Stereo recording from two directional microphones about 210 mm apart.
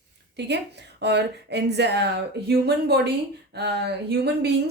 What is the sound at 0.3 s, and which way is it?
A woman's voice, 55° right (ahead or behind).